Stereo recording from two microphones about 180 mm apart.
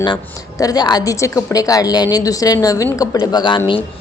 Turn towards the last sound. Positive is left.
turn(degrees=25)  # may be behind; listen again after turning